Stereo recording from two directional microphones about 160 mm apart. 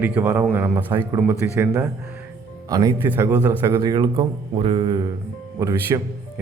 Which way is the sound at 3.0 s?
15° right (ahead or behind).